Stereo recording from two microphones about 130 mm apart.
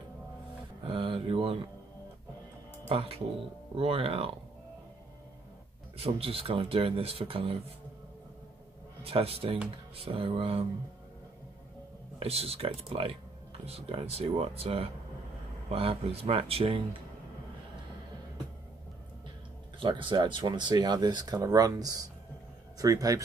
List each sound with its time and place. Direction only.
0.8 s speech: 45° right (ahead or behind)
2.9 s speech: 45° right (ahead or behind)
5.9 s speech: 45° right (ahead or behind)
9.0 s speech: 45° right (ahead or behind)
12.2 s speech: 50° right (ahead or behind)
19.8 s speech: 40° right (ahead or behind)